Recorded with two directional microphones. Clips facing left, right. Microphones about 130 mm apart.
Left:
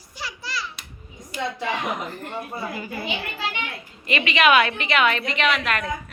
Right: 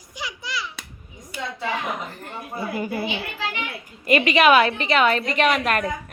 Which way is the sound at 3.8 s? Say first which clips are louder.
Right 7 dB; 45° right (ahead or behind).